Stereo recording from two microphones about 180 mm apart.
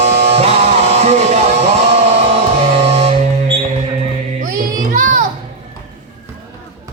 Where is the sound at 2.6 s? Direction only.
35° right (ahead or behind).